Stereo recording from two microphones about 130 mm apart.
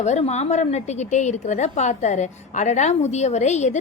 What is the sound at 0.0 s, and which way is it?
A woman's voice, 60° left (ahead or behind).